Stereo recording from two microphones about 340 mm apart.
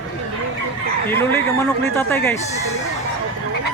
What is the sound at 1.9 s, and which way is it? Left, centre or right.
Speech, centre.